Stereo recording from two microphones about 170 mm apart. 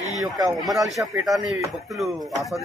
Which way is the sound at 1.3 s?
Centre (ahead or behind).